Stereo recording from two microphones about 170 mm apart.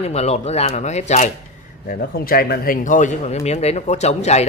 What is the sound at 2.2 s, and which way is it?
Speech, 60° left (ahead or behind).